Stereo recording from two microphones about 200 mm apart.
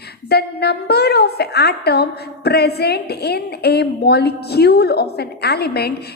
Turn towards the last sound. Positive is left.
turn(degrees=55)  # may be behind; listen again after turning